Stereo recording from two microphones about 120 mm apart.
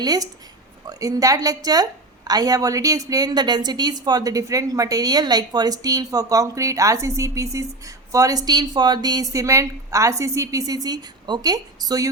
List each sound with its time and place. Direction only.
0.0 s a woman's voice: 35° right (ahead or behind)